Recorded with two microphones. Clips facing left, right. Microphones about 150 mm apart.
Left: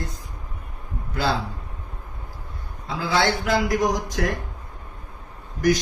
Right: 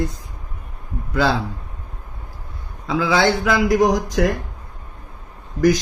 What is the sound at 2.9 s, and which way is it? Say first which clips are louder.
A man's voice: right 5 dB; 90° right.